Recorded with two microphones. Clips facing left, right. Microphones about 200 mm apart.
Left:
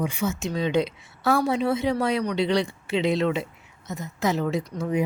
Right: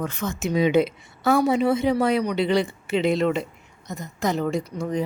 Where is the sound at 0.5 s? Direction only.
15° right (ahead or behind).